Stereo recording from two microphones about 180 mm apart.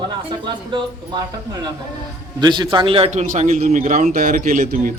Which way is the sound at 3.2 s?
45° right (ahead or behind).